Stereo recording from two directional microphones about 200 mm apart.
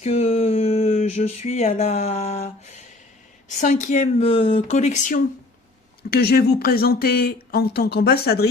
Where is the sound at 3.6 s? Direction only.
40° left (ahead or behind).